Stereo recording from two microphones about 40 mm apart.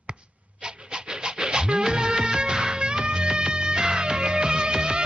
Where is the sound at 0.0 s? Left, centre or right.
Right.